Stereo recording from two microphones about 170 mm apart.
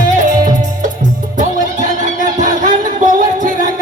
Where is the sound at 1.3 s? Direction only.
45° right (ahead or behind).